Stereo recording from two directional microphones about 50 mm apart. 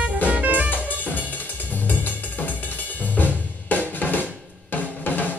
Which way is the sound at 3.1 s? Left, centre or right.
Left.